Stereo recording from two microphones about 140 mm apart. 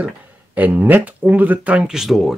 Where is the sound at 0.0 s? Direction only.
10° right (ahead or behind).